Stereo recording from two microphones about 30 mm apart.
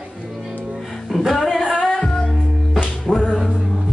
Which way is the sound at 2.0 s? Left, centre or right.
Left.